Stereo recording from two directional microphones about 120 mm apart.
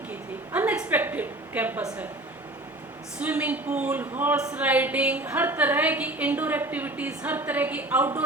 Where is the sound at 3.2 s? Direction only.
10° right (ahead or behind).